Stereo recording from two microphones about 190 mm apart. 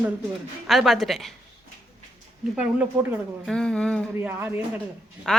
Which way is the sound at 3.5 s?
5° left (ahead or behind).